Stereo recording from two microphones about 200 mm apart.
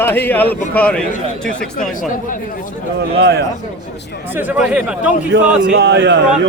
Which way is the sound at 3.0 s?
55° right (ahead or behind).